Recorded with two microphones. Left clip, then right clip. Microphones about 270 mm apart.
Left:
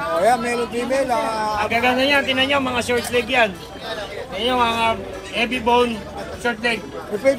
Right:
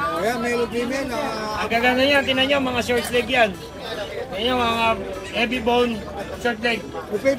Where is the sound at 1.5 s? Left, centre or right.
Centre.